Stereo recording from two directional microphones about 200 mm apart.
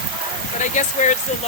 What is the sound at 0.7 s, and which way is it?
Speech, 40° left (ahead or behind).